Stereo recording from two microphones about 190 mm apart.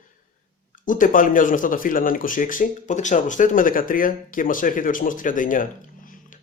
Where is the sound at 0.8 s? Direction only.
45° left (ahead or behind).